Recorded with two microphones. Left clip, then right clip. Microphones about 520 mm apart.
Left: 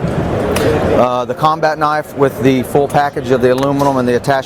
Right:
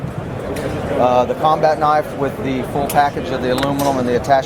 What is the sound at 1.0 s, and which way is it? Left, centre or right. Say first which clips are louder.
Speech: left 1 dB; left.